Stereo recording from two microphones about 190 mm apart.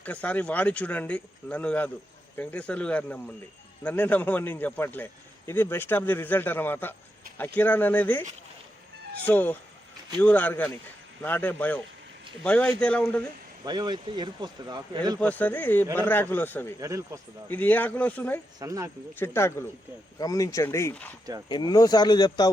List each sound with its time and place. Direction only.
0.0 s a man's voice: 5° left (ahead or behind)
9.2 s a man's voice: 10° left (ahead or behind)
13.7 s speech: 20° right (ahead or behind)
15.2 s a man's voice: 10° left (ahead or behind)
16.8 s speech: 15° right (ahead or behind)
17.5 s a man's voice: 10° left (ahead or behind)
18.6 s speech: 20° right (ahead or behind)
19.1 s a man's voice: 10° left (ahead or behind)